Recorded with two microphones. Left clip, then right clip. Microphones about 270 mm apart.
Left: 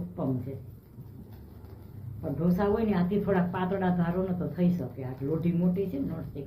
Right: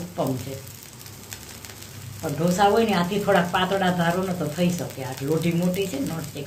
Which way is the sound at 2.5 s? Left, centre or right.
Right.